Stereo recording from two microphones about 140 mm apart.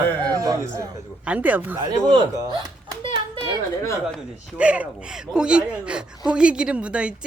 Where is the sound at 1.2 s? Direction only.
10° right (ahead or behind).